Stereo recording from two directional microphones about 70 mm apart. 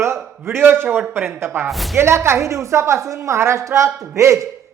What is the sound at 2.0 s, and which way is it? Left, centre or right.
Speech, right.